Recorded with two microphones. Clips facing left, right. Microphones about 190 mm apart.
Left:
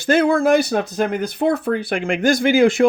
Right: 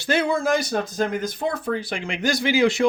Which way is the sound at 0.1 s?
55° left (ahead or behind).